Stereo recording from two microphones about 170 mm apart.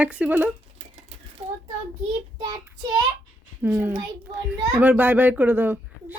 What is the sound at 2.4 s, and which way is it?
Child singing, 25° right (ahead or behind).